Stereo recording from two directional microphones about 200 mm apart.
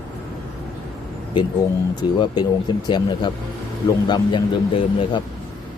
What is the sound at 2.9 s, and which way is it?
Speech, 20° left (ahead or behind).